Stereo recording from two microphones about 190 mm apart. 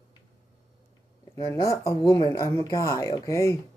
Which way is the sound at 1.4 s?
15° left (ahead or behind).